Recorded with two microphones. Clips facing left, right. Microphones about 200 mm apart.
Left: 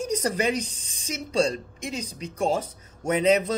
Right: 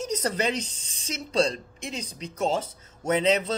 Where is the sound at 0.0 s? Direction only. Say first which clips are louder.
Left 2 dB; 10° left (ahead or behind).